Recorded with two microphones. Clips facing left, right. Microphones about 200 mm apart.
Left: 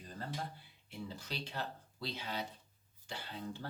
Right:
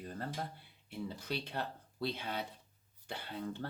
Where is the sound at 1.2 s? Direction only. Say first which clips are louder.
Right 3 dB; 55° right (ahead or behind).